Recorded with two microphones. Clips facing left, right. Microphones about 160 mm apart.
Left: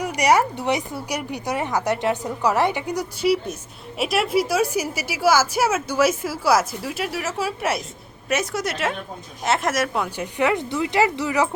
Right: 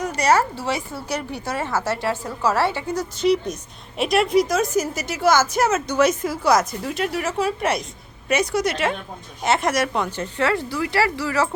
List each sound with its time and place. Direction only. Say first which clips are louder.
0.0 s a woman's voice: even; 15° left (ahead or behind)